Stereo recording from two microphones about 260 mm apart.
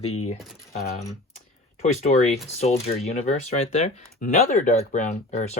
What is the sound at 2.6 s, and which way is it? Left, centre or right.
Speech, left.